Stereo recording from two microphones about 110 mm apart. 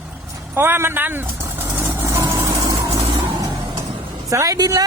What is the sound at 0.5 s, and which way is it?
Vehicle, 20° right (ahead or behind).